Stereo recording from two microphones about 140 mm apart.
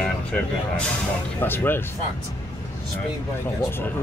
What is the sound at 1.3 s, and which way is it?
Speech, 15° left (ahead or behind).